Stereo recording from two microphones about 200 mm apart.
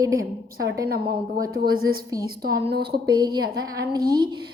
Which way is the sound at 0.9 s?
50° right (ahead or behind).